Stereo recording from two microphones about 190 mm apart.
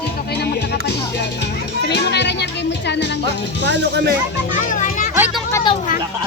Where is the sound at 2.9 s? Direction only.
65° left (ahead or behind).